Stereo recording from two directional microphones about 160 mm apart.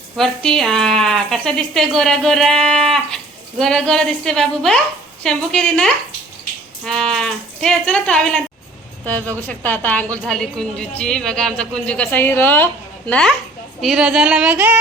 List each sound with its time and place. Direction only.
0.2 s a woman's voice: 5° left (ahead or behind)